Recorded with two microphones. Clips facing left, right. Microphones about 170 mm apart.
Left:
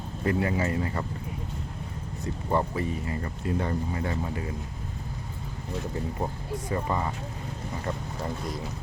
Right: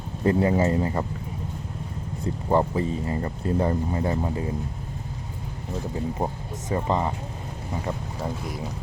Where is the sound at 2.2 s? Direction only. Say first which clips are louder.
Right 5 dB; 30° right (ahead or behind).